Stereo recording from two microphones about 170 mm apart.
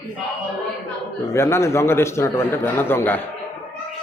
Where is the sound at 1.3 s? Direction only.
15° left (ahead or behind).